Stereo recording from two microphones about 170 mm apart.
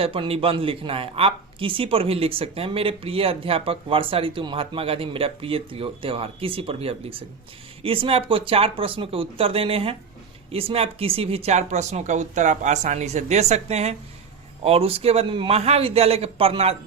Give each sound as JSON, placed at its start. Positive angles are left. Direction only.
{"t": 0.0, "sound": "speech", "side_deg": -35}